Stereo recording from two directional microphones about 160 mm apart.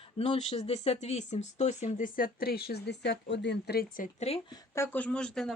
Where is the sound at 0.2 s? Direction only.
40° left (ahead or behind).